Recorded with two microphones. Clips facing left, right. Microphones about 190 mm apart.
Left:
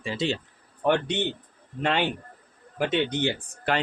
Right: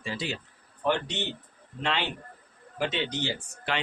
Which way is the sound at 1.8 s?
50° left (ahead or behind).